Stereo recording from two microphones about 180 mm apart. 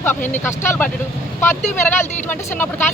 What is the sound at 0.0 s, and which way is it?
Speech, 10° left (ahead or behind).